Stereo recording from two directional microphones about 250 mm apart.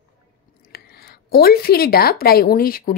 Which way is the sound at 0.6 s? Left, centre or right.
Left.